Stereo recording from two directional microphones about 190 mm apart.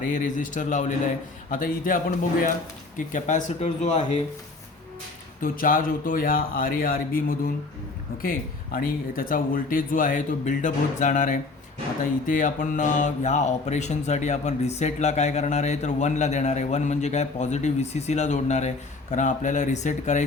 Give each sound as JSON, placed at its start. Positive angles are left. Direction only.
{"t": 0.0, "sound": "speech", "side_deg": 40}
{"t": 3.1, "sound": "speech", "side_deg": 40}
{"t": 5.4, "sound": "speech", "side_deg": 45}